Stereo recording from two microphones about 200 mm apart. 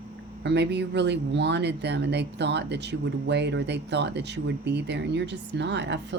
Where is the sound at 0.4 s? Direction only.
60° right (ahead or behind).